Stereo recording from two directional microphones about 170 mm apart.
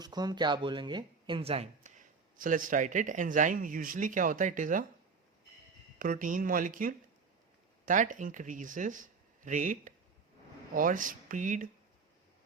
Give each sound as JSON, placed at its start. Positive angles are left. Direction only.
{"t": 0.0, "sound": "speech", "side_deg": -25}
{"t": 6.0, "sound": "speech", "side_deg": -50}